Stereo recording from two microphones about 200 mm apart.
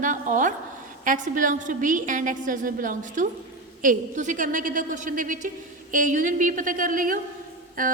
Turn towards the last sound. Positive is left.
turn(degrees=-45)  # may be behind; listen again after turning